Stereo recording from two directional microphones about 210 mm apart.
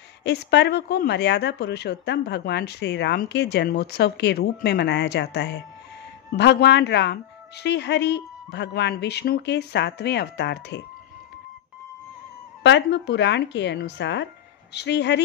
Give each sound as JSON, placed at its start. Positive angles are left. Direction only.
{"t": 0.2, "sound": "speech", "side_deg": 55}
{"t": 12.6, "sound": "speech", "side_deg": 55}